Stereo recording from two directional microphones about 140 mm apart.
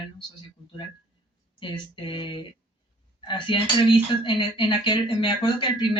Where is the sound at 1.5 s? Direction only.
35° left (ahead or behind).